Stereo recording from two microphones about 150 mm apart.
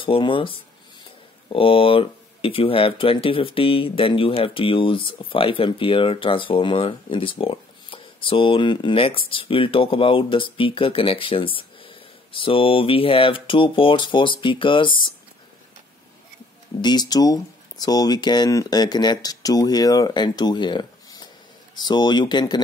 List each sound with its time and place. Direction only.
0.0 s speech: 35° left (ahead or behind)
16.8 s speech: 25° left (ahead or behind)